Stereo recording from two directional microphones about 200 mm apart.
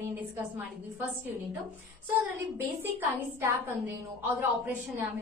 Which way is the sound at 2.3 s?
10° right (ahead or behind).